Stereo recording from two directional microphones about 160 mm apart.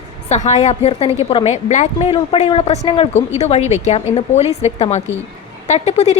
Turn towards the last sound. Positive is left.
turn(degrees=45)  # may be behind; listen again after turning